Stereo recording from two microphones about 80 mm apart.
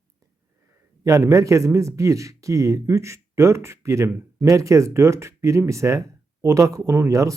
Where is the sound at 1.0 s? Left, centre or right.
Right.